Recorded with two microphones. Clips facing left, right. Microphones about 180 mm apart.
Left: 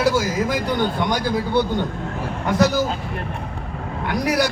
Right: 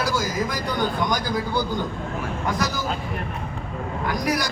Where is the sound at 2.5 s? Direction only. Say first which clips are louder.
Left 9 dB; 70° left (ahead or behind).